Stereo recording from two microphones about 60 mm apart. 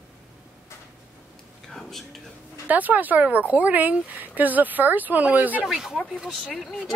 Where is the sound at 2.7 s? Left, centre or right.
Right.